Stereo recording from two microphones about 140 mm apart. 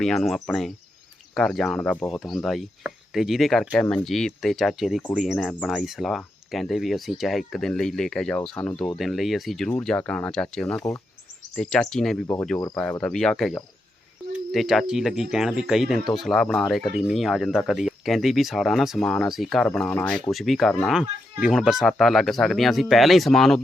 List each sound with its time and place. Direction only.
0.0 s speech: 5° left (ahead or behind)
9.0 s speech: centre (ahead or behind)